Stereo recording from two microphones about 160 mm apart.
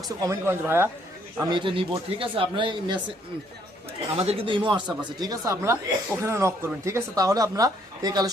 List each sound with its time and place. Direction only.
0.2 s speech: 15° right (ahead or behind)
1.4 s speech: 30° right (ahead or behind)
4.2 s speech: 35° right (ahead or behind)